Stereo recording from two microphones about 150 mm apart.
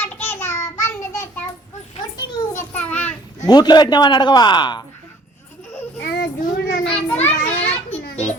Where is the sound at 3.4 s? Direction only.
30° left (ahead or behind).